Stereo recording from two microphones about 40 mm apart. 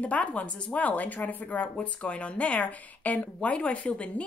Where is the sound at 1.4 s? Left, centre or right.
Left.